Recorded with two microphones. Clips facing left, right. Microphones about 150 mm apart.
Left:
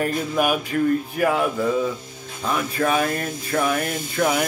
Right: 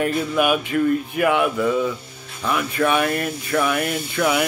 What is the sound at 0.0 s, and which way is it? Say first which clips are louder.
Speech: right 2 dB; 40° left (ahead or behind).